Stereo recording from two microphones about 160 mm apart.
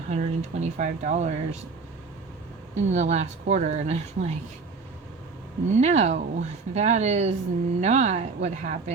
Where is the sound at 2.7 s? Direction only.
45° right (ahead or behind).